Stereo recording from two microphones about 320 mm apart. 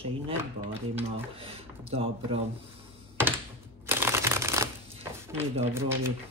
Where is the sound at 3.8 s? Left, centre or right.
Centre.